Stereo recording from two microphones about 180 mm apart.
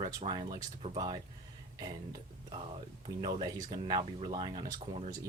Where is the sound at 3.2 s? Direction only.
25° right (ahead or behind).